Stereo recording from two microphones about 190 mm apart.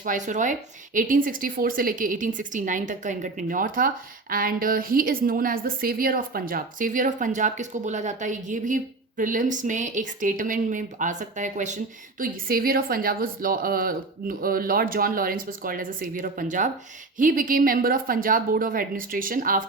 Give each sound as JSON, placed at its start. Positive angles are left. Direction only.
{"t": 0.0, "sound": "a woman's voice", "side_deg": -40}
{"t": 12.2, "sound": "a woman's voice", "side_deg": -50}